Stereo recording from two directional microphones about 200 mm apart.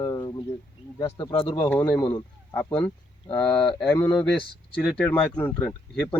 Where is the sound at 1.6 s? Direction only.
10° left (ahead or behind).